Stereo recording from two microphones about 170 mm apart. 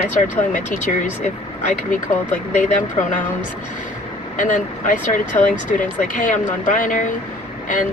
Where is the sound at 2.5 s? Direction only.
45° left (ahead or behind).